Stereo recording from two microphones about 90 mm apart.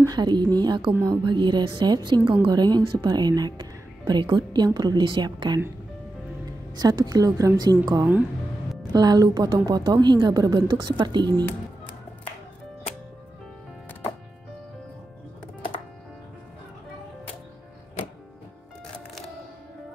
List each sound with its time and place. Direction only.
0.1 s a woman's voice: 55° right (ahead or behind)
6.7 s a woman's voice: 50° right (ahead or behind)